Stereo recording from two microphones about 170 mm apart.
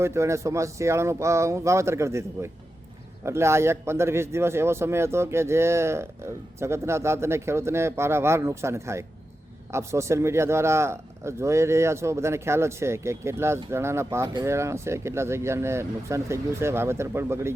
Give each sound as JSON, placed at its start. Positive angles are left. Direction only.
{"t": 0.0, "sound": "a man's voice", "side_deg": -15}